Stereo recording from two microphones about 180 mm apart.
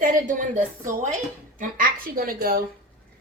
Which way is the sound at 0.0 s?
45° right (ahead or behind).